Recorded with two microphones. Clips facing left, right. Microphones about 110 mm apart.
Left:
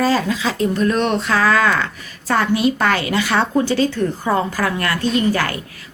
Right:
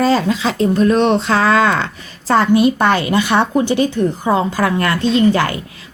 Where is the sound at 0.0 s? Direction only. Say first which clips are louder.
Right 3 dB; 30° right (ahead or behind).